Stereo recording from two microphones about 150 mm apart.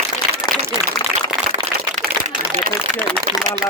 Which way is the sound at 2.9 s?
10° left (ahead or behind).